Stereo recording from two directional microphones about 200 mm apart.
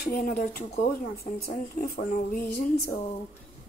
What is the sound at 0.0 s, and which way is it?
Speech, 45° left (ahead or behind).